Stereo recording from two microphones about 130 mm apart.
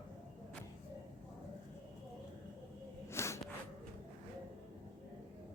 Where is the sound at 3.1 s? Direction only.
20° left (ahead or behind).